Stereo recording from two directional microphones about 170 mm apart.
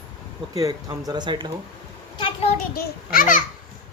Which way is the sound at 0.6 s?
20° right (ahead or behind).